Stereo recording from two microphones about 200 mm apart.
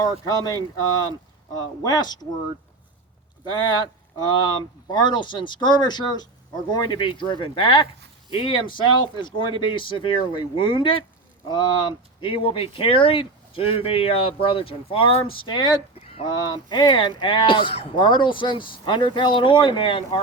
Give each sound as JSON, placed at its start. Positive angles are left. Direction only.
{"t": 0.3, "sound": "speech", "side_deg": 20}
{"t": 1.8, "sound": "speech", "side_deg": 20}
{"t": 3.5, "sound": "speech", "side_deg": 20}